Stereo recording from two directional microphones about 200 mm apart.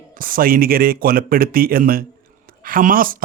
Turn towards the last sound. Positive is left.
turn(degrees=-45)  # may be behind; listen again after turning